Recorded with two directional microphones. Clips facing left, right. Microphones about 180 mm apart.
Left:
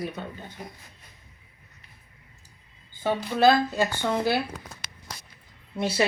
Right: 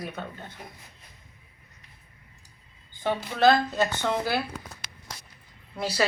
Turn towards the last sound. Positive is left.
turn(degrees=25)  # may be behind; listen again after turning